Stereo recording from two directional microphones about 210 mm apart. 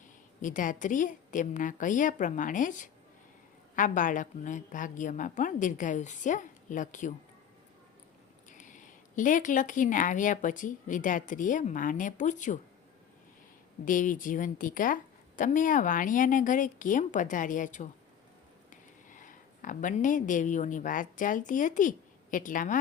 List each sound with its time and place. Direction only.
0.4 s speech: 40° left (ahead or behind)
8.4 s speech: 35° left (ahead or behind)
13.8 s speech: 40° left (ahead or behind)